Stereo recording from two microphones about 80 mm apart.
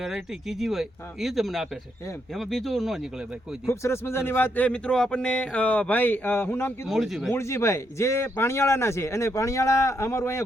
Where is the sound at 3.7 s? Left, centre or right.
Left.